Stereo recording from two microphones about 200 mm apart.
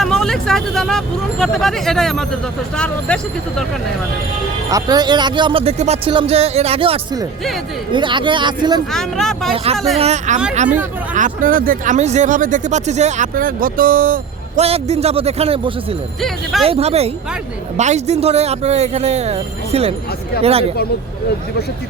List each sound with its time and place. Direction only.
0.0 s speech: centre (ahead or behind)
4.7 s speech: 20° right (ahead or behind)
8.9 s speech: centre (ahead or behind)
10.0 s speech: 35° right (ahead or behind)
14.6 s speech: 30° right (ahead or behind)
16.2 s speech: centre (ahead or behind)
16.6 s speech: 30° right (ahead or behind)